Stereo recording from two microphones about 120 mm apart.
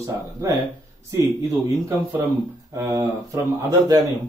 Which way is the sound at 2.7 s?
25° right (ahead or behind).